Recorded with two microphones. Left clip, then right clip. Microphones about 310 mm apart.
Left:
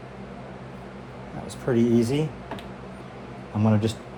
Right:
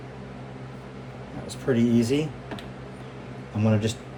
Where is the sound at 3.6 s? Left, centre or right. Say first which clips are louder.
Left 1 dB; centre.